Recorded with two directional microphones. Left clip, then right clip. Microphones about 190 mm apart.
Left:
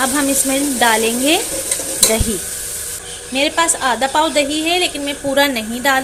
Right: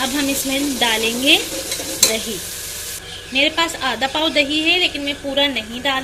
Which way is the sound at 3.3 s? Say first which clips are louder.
Left 1 dB; 20° left (ahead or behind).